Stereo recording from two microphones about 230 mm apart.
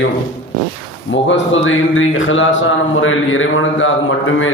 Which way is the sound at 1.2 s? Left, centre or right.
Left.